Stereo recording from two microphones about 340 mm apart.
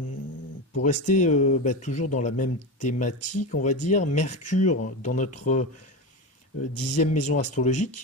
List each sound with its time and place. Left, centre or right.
0.8 s speech: left
6.7 s speech: left
7.0 s speech: left